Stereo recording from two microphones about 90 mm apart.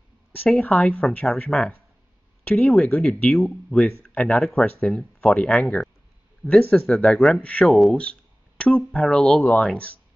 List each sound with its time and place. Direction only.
0.5 s speech: 15° left (ahead or behind)
1.5 s speech: 5° left (ahead or behind)
2.4 s speech: 15° left (ahead or behind)